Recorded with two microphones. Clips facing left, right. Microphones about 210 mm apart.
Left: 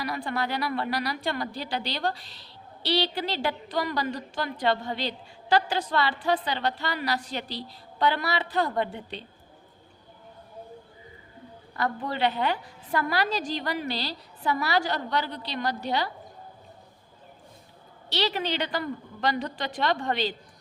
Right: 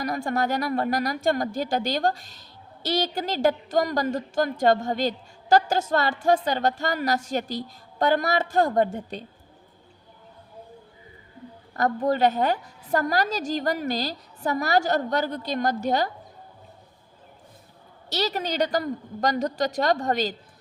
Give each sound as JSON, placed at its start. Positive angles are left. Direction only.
{"t": 0.0, "sound": "a woman's voice", "side_deg": -45}
{"t": 11.7, "sound": "a woman's voice", "side_deg": -45}
{"t": 18.1, "sound": "a woman's voice", "side_deg": -40}